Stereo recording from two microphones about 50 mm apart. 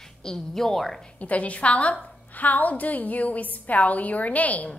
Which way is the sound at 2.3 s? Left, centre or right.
Left.